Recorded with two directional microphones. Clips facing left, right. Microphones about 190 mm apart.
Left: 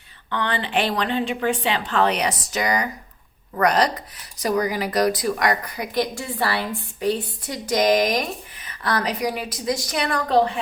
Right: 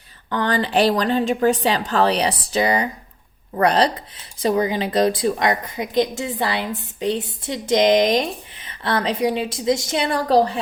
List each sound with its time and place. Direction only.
0.3 s a woman's voice: 40° right (ahead or behind)